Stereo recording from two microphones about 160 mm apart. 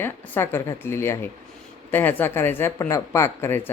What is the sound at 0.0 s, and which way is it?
Speech, 15° left (ahead or behind).